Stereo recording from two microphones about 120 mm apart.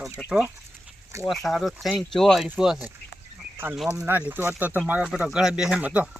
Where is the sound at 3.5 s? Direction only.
15° right (ahead or behind).